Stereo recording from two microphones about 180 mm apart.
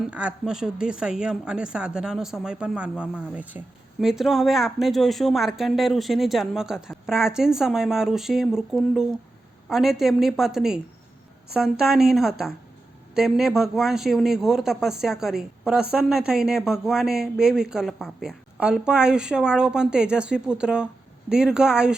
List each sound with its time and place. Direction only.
0.0 s speech: 5° right (ahead or behind)